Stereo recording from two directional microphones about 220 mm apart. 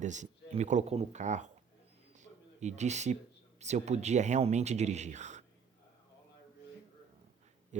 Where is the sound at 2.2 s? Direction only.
30° right (ahead or behind).